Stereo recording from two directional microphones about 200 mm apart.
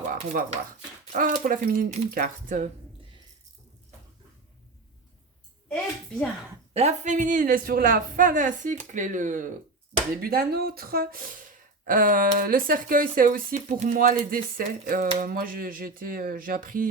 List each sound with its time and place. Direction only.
1.1 s speech: 45° right (ahead or behind)
5.6 s a woman's voice: 5° left (ahead or behind)
6.7 s speech: 35° right (ahead or behind)